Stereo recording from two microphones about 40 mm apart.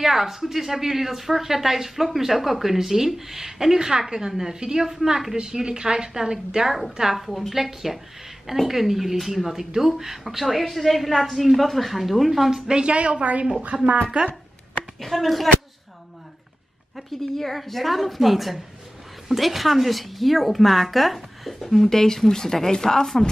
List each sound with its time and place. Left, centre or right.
0.0 s a woman's voice: centre
12.4 s a woman's voice: centre; by 13.5 s right
13.7 s a woman's voice: centre
14.2 s a woman's voice: right
15.0 s a woman's voice: centre
16.9 s a woman's voice: centre